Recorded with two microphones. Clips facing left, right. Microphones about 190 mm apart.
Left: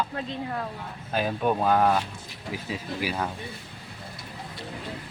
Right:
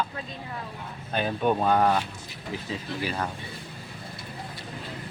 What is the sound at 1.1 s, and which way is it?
Speech, 5° left (ahead or behind).